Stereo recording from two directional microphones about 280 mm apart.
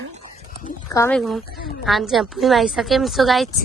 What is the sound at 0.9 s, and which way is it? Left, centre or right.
A woman's voice, centre.